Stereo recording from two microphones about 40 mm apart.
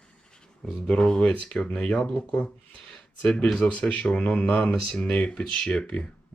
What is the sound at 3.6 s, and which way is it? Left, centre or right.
Speech, left.